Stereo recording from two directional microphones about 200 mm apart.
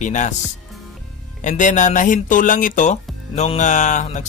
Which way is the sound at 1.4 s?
40° left (ahead or behind).